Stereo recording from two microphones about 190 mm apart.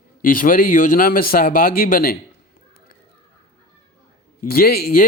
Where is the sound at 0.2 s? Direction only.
45° left (ahead or behind).